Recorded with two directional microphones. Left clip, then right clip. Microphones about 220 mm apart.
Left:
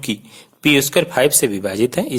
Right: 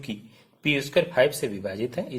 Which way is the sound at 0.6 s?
40° left (ahead or behind).